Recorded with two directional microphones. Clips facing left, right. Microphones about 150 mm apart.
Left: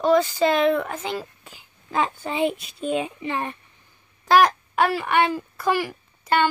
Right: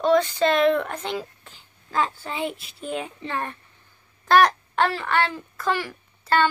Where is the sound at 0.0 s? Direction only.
5° left (ahead or behind).